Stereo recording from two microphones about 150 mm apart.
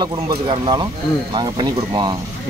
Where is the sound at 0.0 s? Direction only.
30° right (ahead or behind).